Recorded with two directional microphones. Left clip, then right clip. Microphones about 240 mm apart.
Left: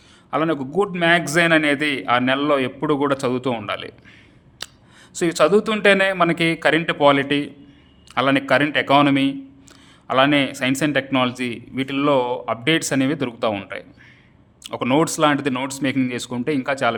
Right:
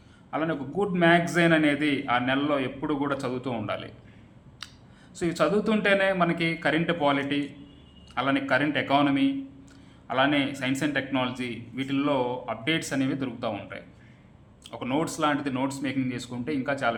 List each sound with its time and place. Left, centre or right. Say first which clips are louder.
0.3 s a man's voice: left 8 dB; left
5.1 s a man's voice: left 9 dB; left